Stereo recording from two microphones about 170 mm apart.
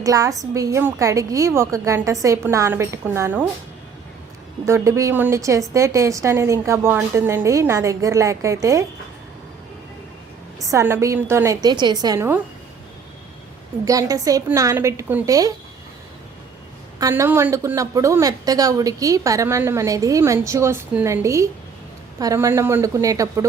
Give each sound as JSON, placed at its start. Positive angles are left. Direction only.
{"t": 0.0, "sound": "a woman's voice", "side_deg": -20}
{"t": 4.6, "sound": "a woman's voice", "side_deg": -15}
{"t": 10.6, "sound": "a woman's voice", "side_deg": -20}
{"t": 13.8, "sound": "a woman's voice", "side_deg": -20}
{"t": 17.0, "sound": "a woman's voice", "side_deg": -15}